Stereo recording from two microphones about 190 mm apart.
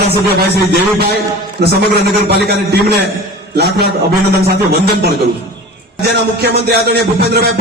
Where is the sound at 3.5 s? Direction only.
55° right (ahead or behind).